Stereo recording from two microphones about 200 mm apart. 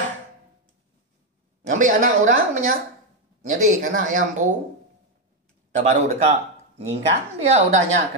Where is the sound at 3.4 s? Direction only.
35° right (ahead or behind).